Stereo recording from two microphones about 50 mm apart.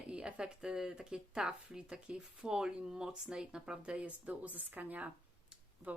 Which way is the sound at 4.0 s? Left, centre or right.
Right.